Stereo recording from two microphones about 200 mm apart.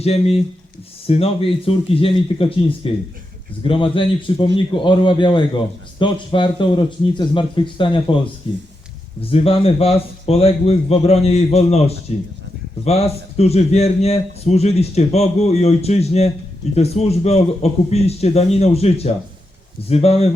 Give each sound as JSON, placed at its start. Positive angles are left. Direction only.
{"t": 0.0, "sound": "a man's voice", "side_deg": 30}